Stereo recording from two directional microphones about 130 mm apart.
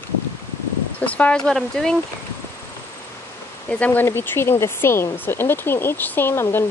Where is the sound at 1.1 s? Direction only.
10° left (ahead or behind).